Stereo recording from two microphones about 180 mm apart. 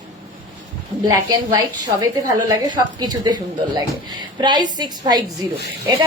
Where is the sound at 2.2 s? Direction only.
25° right (ahead or behind).